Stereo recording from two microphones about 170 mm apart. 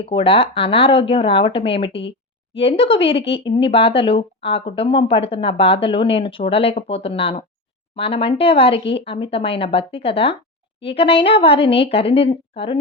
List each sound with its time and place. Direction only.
0.0 s speech: 35° left (ahead or behind)